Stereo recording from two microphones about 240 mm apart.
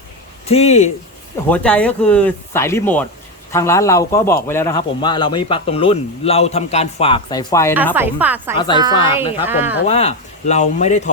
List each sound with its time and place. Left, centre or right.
0.4 s speech: left
1.5 s a man's voice: centre
7.9 s a woman's voice: centre
8.5 s speech: centre
9.5 s a woman's voice: centre
9.8 s speech: left